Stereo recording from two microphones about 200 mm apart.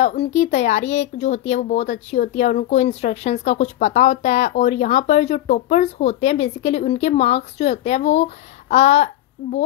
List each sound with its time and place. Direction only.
0.0 s speech: 30° left (ahead or behind)